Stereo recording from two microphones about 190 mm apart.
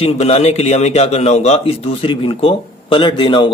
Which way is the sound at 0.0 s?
35° left (ahead or behind).